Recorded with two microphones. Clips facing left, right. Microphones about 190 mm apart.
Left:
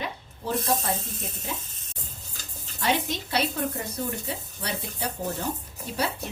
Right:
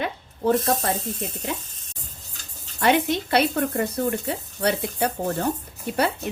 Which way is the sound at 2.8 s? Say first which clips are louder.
Right 7 dB; 60° right (ahead or behind).